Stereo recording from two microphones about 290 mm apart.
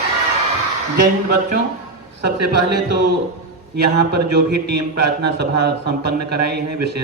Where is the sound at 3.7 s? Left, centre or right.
Right.